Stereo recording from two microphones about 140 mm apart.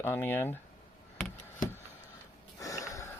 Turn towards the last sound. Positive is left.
turn(degrees=20)  # may be behind; listen again after turning